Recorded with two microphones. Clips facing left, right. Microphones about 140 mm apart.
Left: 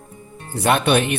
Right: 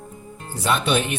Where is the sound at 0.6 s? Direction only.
60° left (ahead or behind).